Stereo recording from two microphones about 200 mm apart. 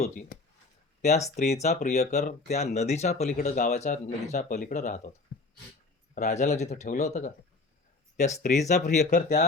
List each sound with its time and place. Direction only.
0.0 s speech: 40° left (ahead or behind)
6.1 s speech: 35° left (ahead or behind)
8.4 s speech: 35° left (ahead or behind)